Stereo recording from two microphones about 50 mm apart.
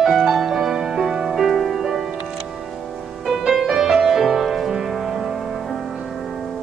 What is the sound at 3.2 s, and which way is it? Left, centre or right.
Music, centre.